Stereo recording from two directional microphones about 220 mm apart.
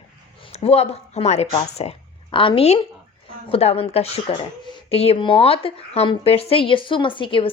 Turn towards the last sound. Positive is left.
turn(degrees=25)  # may be behind; listen again after turning